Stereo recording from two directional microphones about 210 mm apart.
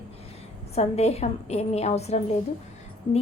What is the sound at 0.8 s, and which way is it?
A woman's voice, 30° left (ahead or behind).